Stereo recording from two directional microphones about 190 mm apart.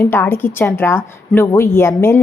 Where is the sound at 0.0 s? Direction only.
15° left (ahead or behind).